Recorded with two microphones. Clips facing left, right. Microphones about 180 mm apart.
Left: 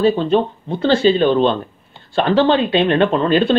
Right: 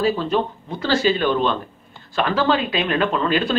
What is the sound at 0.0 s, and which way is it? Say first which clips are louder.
Speech: left 5 dB; 25° left (ahead or behind).